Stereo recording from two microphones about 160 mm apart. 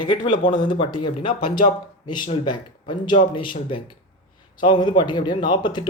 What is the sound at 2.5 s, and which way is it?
A man's voice, 30° left (ahead or behind).